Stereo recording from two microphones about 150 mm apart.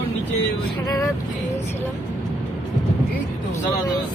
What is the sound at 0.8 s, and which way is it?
Speech, 25° left (ahead or behind).